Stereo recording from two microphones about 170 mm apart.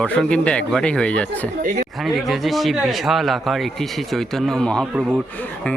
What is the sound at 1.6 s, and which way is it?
Speech, 50° right (ahead or behind).